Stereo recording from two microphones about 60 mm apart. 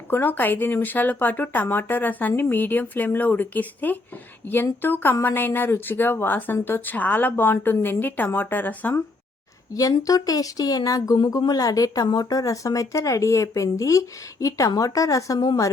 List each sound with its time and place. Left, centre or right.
0.1 s speech: left
9.7 s speech: left